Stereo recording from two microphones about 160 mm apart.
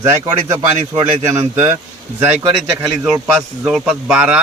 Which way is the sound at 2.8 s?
5° right (ahead or behind).